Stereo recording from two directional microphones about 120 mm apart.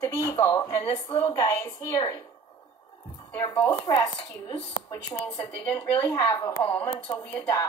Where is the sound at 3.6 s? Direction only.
15° left (ahead or behind).